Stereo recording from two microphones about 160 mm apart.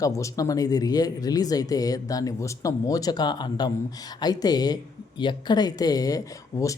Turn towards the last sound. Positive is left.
turn(degrees=20)  # may be behind; listen again after turning